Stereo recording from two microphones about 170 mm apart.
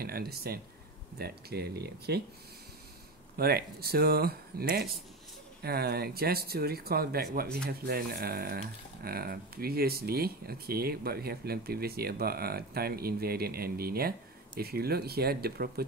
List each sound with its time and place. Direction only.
0.0 s speech: 65° right (ahead or behind)
3.3 s speech: 65° right (ahead or behind)